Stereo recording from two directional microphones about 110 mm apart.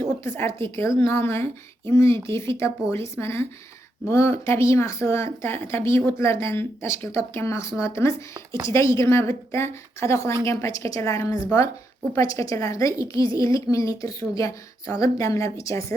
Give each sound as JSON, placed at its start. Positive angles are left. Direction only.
{"t": 0.3, "sound": "a woman's voice", "side_deg": 20}